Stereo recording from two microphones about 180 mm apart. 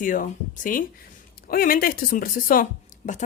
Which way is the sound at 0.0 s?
45° left (ahead or behind).